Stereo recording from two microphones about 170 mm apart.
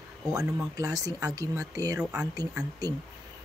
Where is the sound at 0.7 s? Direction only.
20° right (ahead or behind).